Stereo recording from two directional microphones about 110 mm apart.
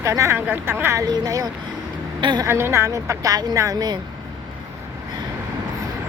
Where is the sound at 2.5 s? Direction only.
20° right (ahead or behind); by 4.0 s 40° right (ahead or behind).